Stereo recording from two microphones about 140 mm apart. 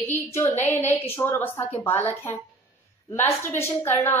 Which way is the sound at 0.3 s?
15° left (ahead or behind).